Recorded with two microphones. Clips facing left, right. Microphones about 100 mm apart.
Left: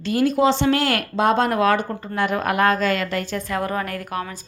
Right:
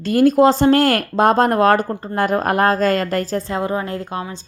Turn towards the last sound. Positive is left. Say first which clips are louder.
# right 2 dB
turn(degrees=-25)  # may be behind; listen again after turning